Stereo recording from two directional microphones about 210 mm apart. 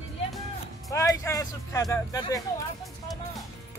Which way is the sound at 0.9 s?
15° left (ahead or behind).